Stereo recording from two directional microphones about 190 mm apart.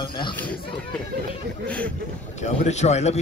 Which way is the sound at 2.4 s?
35° left (ahead or behind).